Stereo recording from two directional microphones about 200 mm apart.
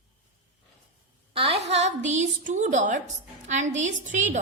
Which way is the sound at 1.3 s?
30° right (ahead or behind).